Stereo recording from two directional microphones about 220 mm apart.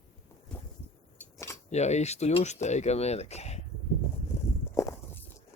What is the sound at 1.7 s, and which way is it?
Speech, 30° left (ahead or behind).